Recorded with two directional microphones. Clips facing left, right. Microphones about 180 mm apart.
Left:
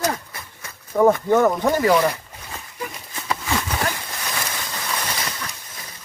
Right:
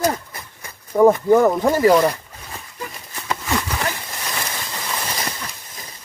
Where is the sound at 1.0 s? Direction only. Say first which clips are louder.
Right 3 dB; 10° right (ahead or behind).